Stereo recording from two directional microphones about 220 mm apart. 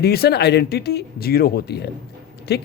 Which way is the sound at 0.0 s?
45° left (ahead or behind).